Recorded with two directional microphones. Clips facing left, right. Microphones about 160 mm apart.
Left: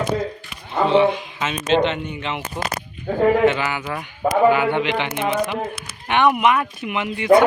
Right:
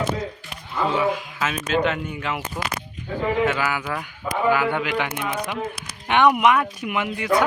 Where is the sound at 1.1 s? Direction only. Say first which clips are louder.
Even; 30° left (ahead or behind).